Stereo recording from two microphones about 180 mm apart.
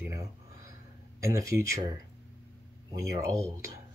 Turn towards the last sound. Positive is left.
turn(degrees=-15)  # may be behind; listen again after turning